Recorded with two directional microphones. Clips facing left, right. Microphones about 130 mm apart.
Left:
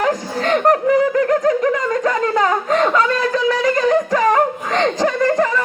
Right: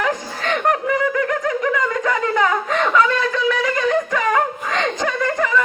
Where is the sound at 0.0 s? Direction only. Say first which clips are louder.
Left 4 dB; 40° left (ahead or behind).